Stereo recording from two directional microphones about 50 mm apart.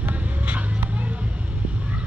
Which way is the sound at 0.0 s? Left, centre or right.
Right.